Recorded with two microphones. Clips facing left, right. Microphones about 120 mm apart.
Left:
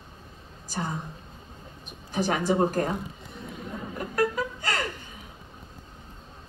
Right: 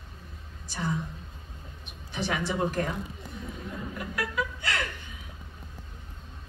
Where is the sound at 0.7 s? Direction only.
40° left (ahead or behind).